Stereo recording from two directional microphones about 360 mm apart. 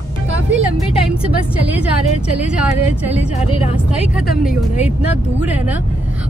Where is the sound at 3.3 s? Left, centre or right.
Centre.